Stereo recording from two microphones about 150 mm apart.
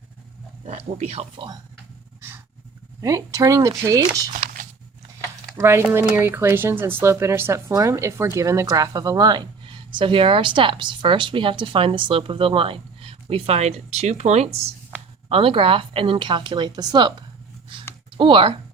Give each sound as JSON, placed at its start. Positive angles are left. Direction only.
{"t": 0.7, "sound": "speech", "side_deg": -45}
{"t": 3.0, "sound": "speech", "side_deg": -20}
{"t": 5.5, "sound": "speech", "side_deg": -15}
{"t": 18.2, "sound": "speech", "side_deg": -35}